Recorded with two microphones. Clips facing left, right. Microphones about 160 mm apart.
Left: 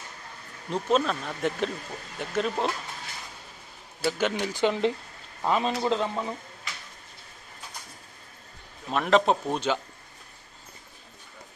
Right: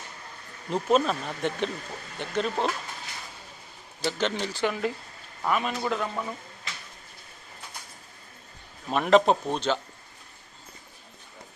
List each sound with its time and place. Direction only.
0.7 s speech: 5° right (ahead or behind)
4.0 s speech: 10° left (ahead or behind)
8.9 s speech: centre (ahead or behind)